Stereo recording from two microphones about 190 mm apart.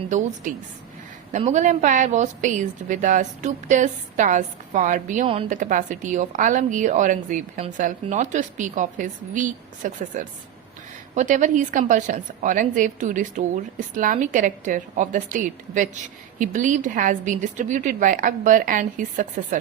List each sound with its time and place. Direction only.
0.1 s a woman's voice: 40° right (ahead or behind)
1.3 s a woman's voice: 40° right (ahead or behind)
5.2 s a woman's voice: 30° right (ahead or behind)
5.5 s a woman's voice: 45° right (ahead or behind)